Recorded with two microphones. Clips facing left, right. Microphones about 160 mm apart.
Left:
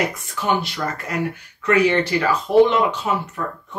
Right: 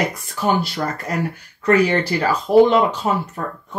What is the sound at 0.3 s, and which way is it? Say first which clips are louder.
Speech: right 2 dB; 35° right (ahead or behind).